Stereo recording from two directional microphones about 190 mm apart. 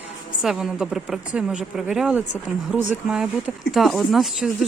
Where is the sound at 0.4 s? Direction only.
Centre (ahead or behind).